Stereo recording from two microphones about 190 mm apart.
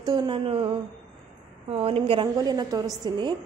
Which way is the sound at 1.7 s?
30° right (ahead or behind).